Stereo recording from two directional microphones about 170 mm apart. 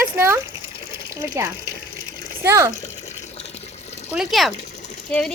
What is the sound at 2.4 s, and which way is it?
Speech, 15° right (ahead or behind).